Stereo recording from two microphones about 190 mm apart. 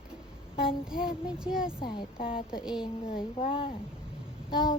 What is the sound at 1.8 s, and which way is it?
Speech, 25° left (ahead or behind).